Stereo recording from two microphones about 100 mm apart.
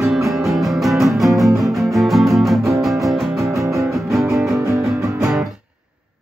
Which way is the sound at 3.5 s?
30° right (ahead or behind).